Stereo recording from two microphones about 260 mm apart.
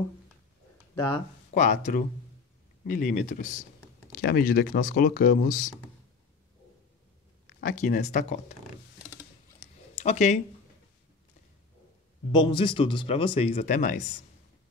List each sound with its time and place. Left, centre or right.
1.0 s speech: left
7.6 s speech: left
9.9 s speech: left
12.3 s speech: centre